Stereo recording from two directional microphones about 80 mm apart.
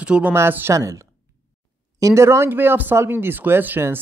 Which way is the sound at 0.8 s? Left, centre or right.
Right.